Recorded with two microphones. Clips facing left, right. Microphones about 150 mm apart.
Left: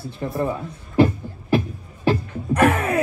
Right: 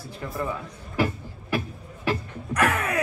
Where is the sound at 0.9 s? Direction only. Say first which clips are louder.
Left 9 dB; 25° left (ahead or behind).